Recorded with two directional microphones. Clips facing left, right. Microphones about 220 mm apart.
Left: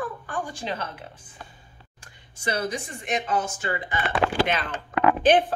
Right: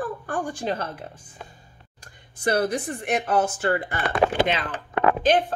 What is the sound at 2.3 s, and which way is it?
Speech, 60° right (ahead or behind).